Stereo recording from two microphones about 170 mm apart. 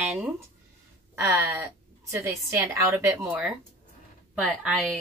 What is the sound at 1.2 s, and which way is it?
A woman's voice, 15° right (ahead or behind).